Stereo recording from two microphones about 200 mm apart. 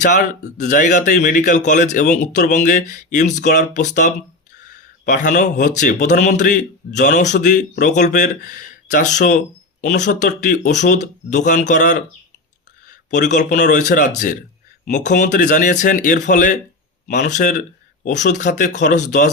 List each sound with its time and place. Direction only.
0.0 s a man's voice: 40° left (ahead or behind)